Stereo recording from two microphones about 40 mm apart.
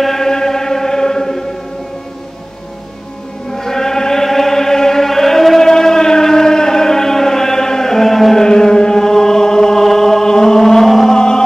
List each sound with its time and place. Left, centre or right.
0.0 s chant: centre
3.5 s chant: centre
5.7 s a sound: centre
8.5 s chant: centre
11.1 s music: centre